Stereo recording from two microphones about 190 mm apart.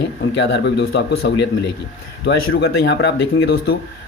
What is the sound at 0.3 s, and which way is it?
Speech, 70° left (ahead or behind).